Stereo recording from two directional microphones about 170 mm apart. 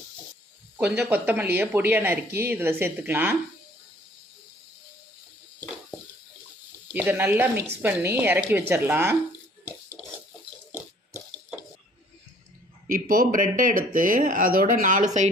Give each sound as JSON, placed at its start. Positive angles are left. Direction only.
{"t": 0.8, "sound": "a woman's voice", "side_deg": -10}
{"t": 6.9, "sound": "a woman's voice", "side_deg": -10}
{"t": 12.9, "sound": "speech", "side_deg": -55}